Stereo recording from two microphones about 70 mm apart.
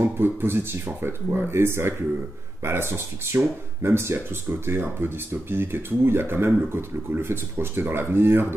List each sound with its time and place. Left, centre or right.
0.0 s speech: right